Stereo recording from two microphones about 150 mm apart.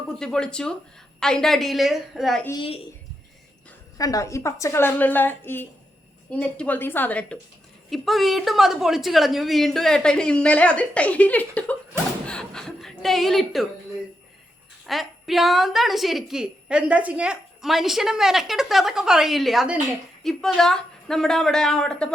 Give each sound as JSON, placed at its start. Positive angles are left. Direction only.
{"t": 0.2, "sound": "a woman's voice", "side_deg": 5}
{"t": 2.6, "sound": "a woman's voice", "side_deg": 40}
{"t": 3.9, "sound": "a woman's voice", "side_deg": 25}
{"t": 12.2, "sound": "chuckle", "side_deg": 5}
{"t": 14.8, "sound": "a woman's voice", "side_deg": 0}